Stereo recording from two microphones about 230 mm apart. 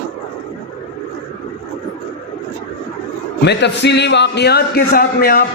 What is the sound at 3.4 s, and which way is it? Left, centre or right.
A man's voice, left.